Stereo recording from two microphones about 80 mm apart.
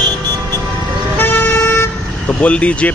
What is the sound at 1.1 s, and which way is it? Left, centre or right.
Toot, left.